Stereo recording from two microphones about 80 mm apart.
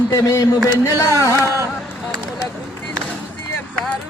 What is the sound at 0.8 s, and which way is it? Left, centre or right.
Carnatic music, left.